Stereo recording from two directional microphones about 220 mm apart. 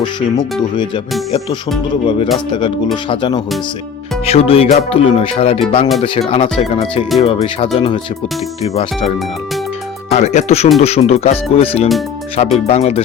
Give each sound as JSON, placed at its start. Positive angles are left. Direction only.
{"t": 0.6, "sound": "speech", "side_deg": 20}
{"t": 2.0, "sound": "speech", "side_deg": 25}
{"t": 8.7, "sound": "speech", "side_deg": 25}
{"t": 10.1, "sound": "speech", "side_deg": 30}